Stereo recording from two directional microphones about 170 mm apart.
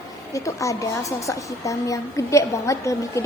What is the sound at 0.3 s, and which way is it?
A woman's voice, 20° left (ahead or behind).